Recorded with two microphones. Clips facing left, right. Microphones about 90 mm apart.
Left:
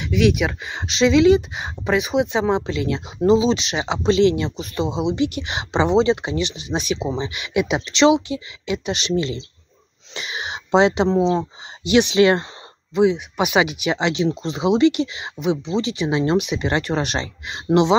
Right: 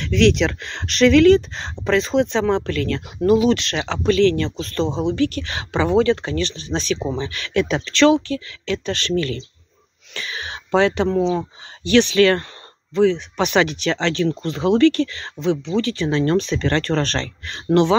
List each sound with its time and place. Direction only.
0.0 s speech: 10° left (ahead or behind)